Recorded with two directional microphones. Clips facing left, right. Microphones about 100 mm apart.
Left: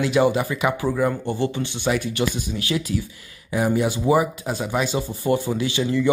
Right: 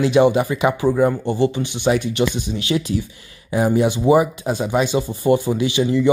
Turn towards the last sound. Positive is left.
turn(degrees=-20)  # may be behind; listen again after turning